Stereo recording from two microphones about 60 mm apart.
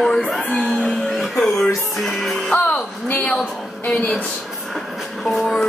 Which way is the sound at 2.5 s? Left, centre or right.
Left.